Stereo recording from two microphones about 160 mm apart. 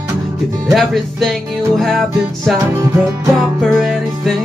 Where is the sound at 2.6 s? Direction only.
15° right (ahead or behind).